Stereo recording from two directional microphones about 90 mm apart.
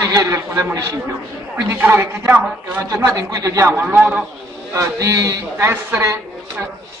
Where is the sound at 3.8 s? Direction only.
15° right (ahead or behind).